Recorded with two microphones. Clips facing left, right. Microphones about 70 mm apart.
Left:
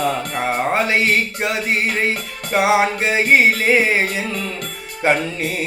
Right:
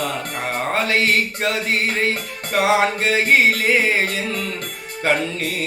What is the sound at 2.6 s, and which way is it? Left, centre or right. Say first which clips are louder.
Music: left 1 dB; centre.